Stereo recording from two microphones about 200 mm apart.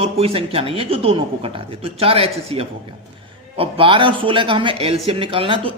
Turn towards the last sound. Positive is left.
turn(degrees=-25)  # may be behind; listen again after turning